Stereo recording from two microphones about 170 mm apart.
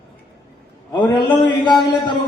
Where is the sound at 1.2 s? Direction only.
25° left (ahead or behind).